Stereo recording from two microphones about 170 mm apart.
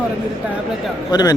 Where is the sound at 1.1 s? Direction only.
20° left (ahead or behind).